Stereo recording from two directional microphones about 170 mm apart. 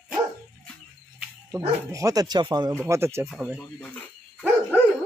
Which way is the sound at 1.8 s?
20° right (ahead or behind).